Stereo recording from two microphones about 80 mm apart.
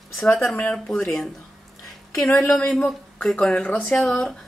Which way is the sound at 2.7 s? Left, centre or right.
Centre.